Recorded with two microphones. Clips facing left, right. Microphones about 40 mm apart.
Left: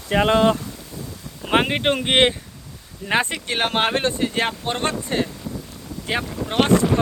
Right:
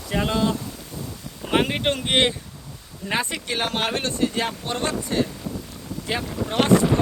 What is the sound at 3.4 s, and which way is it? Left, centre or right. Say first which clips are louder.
Speech: left 4 dB; left.